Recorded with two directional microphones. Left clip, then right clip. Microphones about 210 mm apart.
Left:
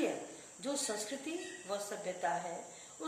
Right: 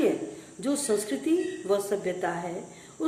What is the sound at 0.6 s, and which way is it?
Speech, 15° right (ahead or behind).